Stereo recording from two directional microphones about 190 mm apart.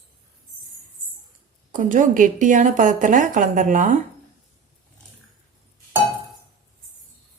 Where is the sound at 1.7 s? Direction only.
40° right (ahead or behind).